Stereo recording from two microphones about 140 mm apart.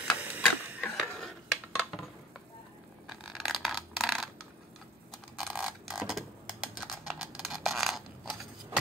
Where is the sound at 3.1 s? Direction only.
Centre (ahead or behind).